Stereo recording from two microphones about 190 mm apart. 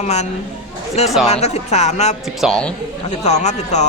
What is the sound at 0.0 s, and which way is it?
Speech, 35° left (ahead or behind).